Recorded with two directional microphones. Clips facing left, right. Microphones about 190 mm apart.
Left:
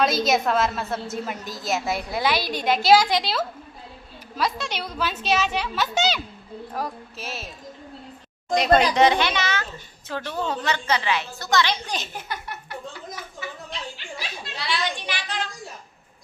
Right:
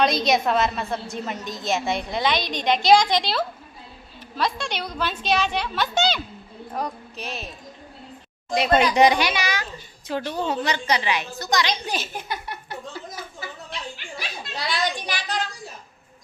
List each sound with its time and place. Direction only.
0.0 s a woman's voice: 5° left (ahead or behind)
8.5 s a woman's voice: 5° right (ahead or behind)
14.7 s speech: 40° right (ahead or behind)